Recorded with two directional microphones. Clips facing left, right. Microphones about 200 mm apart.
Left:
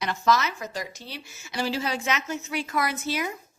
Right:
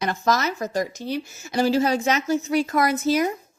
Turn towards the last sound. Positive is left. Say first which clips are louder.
# right 8 dB
turn(degrees=-45)  # may be behind; listen again after turning